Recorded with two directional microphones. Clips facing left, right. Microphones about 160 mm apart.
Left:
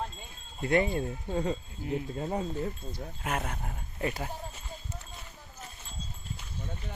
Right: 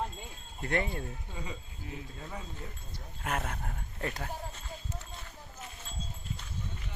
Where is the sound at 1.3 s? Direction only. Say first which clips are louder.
Left 12 dB; 55° left (ahead or behind).